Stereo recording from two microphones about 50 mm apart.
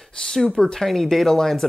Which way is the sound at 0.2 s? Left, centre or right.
Centre.